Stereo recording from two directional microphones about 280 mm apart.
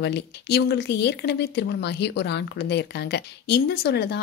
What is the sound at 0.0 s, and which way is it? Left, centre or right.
Speech, left.